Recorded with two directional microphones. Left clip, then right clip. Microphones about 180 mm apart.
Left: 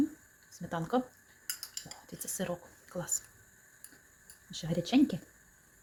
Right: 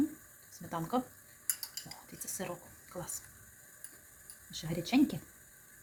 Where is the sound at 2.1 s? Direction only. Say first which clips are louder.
Left 4 dB; 25° left (ahead or behind).